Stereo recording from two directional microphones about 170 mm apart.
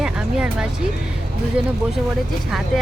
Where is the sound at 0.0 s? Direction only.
5° right (ahead or behind).